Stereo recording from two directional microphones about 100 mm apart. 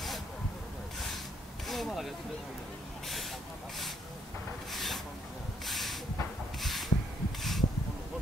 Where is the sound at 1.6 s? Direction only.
Centre (ahead or behind).